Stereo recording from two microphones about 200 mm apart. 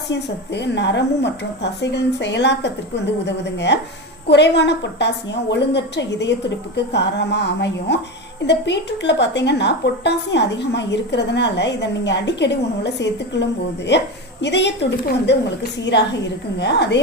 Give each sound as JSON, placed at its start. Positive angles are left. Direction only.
{"t": 0.1, "sound": "a woman's voice", "side_deg": 60}